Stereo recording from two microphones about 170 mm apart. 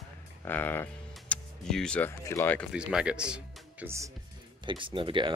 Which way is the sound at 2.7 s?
5° right (ahead or behind).